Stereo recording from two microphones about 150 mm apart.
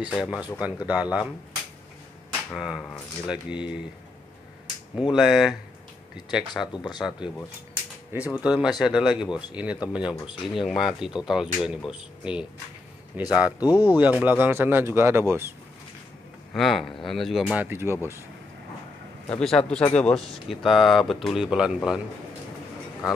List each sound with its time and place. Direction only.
0.0 s speech: 5° right (ahead or behind)
2.5 s speech: centre (ahead or behind)
5.1 s speech: 5° right (ahead or behind)
8.1 s speech: 15° right (ahead or behind)
8.5 s speech: 5° right (ahead or behind)
13.5 s speech: 25° left (ahead or behind)
13.8 s speech: 15° right (ahead or behind)
16.5 s speech: centre (ahead or behind)
17.6 s speech: 15° right (ahead or behind)
19.4 s speech: 5° left (ahead or behind)